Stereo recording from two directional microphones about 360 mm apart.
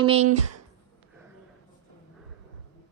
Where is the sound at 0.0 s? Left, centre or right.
Centre.